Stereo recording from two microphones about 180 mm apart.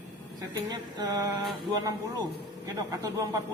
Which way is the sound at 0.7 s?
20° right (ahead or behind).